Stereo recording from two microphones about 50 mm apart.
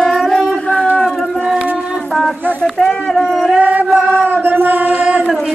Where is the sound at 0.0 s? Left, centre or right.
Centre.